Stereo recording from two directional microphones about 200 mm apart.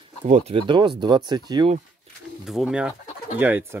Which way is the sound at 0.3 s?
30° right (ahead or behind).